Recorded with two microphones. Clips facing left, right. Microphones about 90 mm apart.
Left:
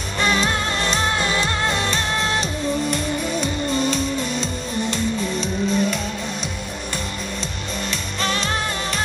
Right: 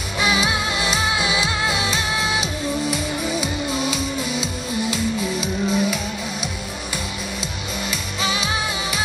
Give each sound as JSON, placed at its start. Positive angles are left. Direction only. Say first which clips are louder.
{"t": 0.2, "sound": "music", "louder": "even", "side_deg": -5}
{"t": 8.2, "sound": "music", "louder": "left 1 dB", "side_deg": -5}